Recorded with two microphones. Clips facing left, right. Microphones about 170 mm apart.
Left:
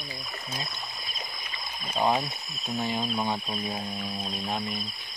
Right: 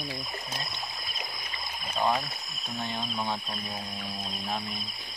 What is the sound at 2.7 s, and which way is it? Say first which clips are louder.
Speech: left 5 dB; 5° left (ahead or behind).